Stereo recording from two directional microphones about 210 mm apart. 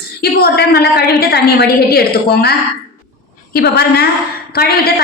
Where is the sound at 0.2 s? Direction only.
50° left (ahead or behind).